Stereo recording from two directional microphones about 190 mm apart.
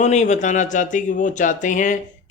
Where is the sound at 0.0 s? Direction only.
35° left (ahead or behind).